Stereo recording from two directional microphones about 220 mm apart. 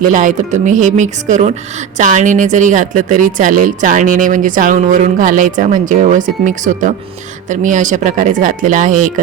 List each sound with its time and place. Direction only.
0.1 s speech: 35° right (ahead or behind)